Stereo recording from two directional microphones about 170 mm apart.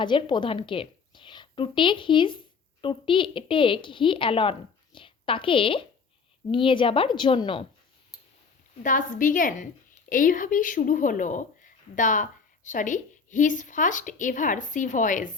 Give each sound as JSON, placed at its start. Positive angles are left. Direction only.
{"t": 0.0, "sound": "a woman's voice", "side_deg": 30}
{"t": 8.8, "sound": "a woman's voice", "side_deg": 50}